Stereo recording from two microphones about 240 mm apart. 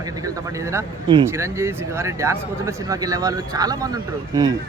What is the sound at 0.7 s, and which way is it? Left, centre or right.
Speech, centre.